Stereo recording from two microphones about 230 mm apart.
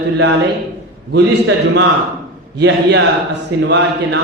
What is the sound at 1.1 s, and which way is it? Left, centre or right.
A man's voice, right.